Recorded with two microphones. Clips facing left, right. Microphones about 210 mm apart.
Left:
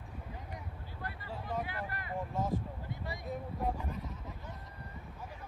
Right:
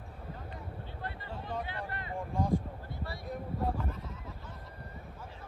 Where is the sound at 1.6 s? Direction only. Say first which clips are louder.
Even; 25° right (ahead or behind).